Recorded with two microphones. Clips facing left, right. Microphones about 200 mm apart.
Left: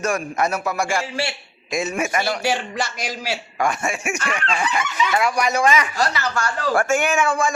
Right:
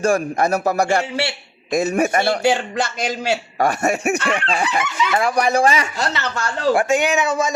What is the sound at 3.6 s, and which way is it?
Speech, 40° right (ahead or behind).